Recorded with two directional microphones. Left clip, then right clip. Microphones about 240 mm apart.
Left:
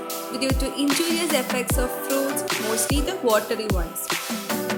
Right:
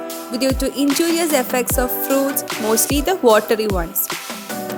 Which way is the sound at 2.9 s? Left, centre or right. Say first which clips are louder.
Right 8 dB; right.